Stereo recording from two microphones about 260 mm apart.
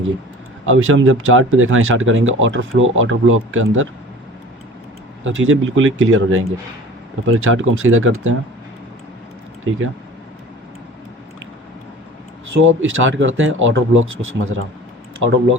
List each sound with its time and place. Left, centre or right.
0.6 s speech: right
5.2 s speech: right
12.5 s speech: right